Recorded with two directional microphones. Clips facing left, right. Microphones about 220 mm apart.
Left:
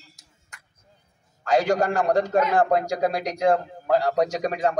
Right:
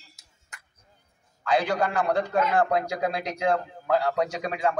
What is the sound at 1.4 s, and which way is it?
A man's voice, 45° left (ahead or behind).